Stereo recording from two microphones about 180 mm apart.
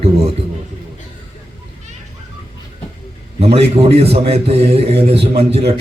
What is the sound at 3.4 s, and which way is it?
A man's voice, 35° right (ahead or behind).